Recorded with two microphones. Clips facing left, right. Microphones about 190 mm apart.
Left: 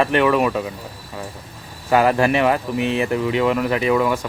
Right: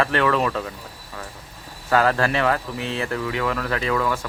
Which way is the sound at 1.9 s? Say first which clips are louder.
Left 4 dB; 15° left (ahead or behind).